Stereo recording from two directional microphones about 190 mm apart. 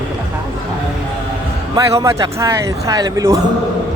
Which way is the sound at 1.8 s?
15° right (ahead or behind).